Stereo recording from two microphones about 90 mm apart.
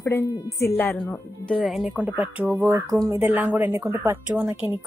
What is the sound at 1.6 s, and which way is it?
Speech, 5° right (ahead or behind).